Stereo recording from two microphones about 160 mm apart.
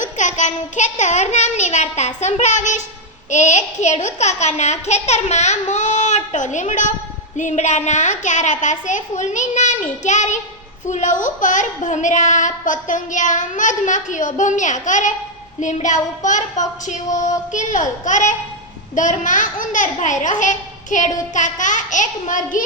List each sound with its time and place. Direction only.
0.0 s a child's voice: 50° left (ahead or behind)